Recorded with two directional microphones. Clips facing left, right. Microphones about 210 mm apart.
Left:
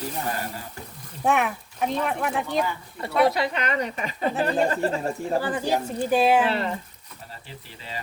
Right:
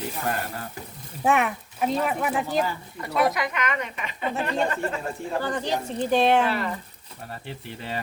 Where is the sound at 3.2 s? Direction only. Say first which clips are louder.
Left 2 dB; 30° left (ahead or behind).